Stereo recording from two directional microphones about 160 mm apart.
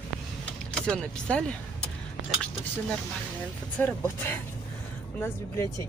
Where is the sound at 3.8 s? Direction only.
10° left (ahead or behind).